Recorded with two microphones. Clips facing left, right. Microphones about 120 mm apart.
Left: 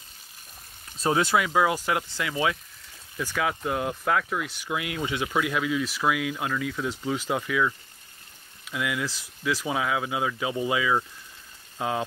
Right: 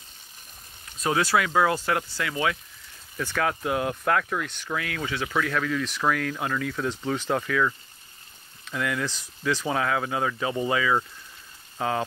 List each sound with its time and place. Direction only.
0.9 s speech: 25° left (ahead or behind)
3.2 s speech: 5° left (ahead or behind)